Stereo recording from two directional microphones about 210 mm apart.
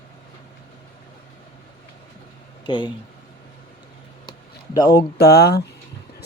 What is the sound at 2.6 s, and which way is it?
Speech, 20° left (ahead or behind).